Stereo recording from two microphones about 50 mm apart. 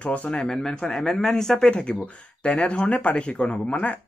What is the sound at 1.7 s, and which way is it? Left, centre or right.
Speech, left.